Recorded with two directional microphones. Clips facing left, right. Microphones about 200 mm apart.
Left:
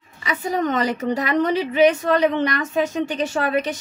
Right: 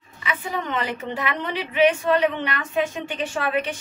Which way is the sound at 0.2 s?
40° left (ahead or behind).